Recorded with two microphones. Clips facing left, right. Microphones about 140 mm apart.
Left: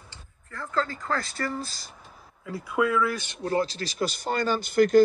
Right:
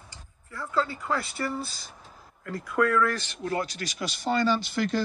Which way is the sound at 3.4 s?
30° left (ahead or behind).